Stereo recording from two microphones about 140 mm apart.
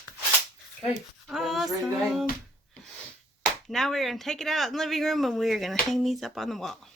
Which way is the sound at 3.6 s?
Centre (ahead or behind).